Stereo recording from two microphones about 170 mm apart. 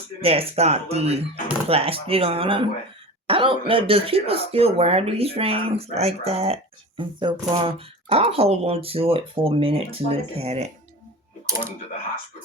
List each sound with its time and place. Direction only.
0.2 s speech: 35° right (ahead or behind)